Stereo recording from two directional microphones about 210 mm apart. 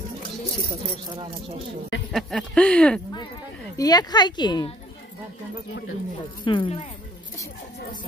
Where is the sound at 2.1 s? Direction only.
Centre (ahead or behind).